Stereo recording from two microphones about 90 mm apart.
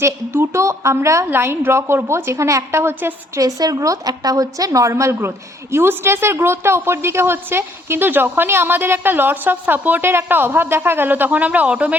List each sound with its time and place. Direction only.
0.0 s a woman's voice: 30° right (ahead or behind)
3.4 s a woman's voice: 40° right (ahead or behind); by 11.9 s 15° right (ahead or behind)